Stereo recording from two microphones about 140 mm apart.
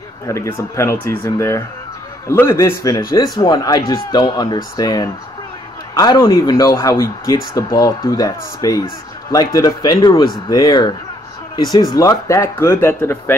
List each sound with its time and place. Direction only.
0.3 s speech: 20° left (ahead or behind)